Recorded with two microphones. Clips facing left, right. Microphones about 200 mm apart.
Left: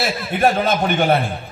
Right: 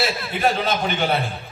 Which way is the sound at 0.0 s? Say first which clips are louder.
Left 4 dB; 50° left (ahead or behind).